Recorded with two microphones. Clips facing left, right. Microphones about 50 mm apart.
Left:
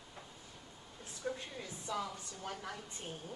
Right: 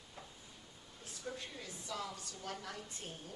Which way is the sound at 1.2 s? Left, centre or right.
Left.